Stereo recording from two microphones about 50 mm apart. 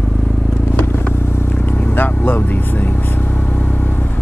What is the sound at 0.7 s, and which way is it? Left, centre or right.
Vehicle, left.